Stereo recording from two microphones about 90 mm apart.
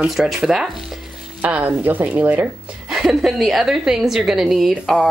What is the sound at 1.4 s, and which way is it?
Speech, 20° right (ahead or behind).